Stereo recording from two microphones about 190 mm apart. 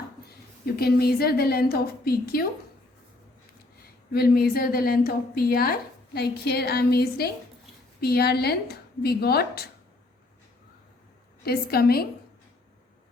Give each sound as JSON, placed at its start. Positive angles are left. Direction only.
{"t": 0.6, "sound": "a woman's voice", "side_deg": 55}
{"t": 4.1, "sound": "a woman's voice", "side_deg": 55}
{"t": 11.4, "sound": "a woman's voice", "side_deg": 55}